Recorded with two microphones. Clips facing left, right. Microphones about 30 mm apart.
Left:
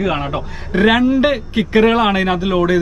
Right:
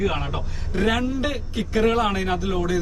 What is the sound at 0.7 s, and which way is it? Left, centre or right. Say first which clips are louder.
Speech: left 10 dB; left.